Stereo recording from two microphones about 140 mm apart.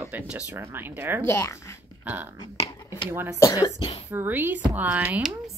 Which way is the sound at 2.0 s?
10° right (ahead or behind).